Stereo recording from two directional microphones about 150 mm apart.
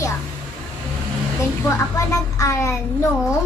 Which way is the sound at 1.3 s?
20° left (ahead or behind).